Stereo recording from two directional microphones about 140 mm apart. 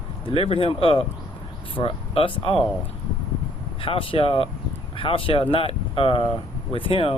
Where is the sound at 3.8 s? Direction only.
40° left (ahead or behind).